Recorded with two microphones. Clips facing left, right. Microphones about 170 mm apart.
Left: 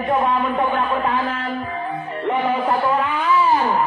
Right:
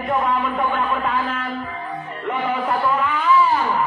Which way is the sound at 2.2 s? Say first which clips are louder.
Left 3 dB; 30° left (ahead or behind).